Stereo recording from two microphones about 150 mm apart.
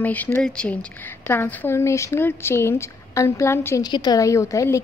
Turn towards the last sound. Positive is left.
turn(degrees=20)  # may be behind; listen again after turning